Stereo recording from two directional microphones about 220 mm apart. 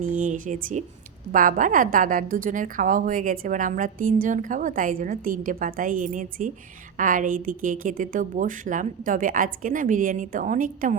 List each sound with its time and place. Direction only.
0.0 s a woman's voice: 35° right (ahead or behind)